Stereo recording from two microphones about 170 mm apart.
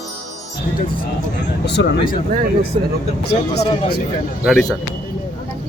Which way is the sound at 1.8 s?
90° left.